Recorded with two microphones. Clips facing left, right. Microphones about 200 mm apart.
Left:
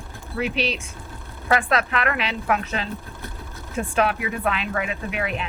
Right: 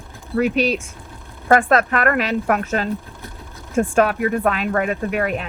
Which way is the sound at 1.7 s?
45° right (ahead or behind).